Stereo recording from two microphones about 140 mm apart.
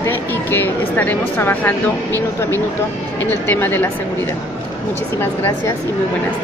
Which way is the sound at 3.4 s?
15° left (ahead or behind).